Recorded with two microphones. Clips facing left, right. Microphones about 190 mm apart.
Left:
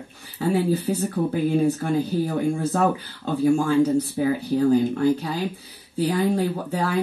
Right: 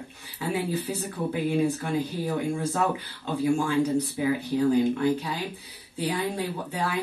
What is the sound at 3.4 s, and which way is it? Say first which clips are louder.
Speech: left 5 dB; 45° left (ahead or behind).